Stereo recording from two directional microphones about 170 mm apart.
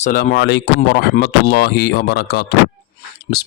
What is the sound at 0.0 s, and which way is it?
Speech, 50° left (ahead or behind).